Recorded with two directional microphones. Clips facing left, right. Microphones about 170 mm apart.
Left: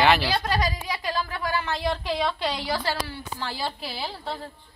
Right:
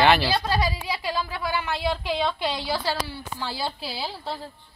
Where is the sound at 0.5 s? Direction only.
10° right (ahead or behind).